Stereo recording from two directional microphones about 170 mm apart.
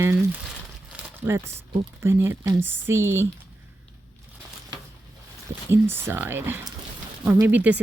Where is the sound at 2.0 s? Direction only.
15° right (ahead or behind).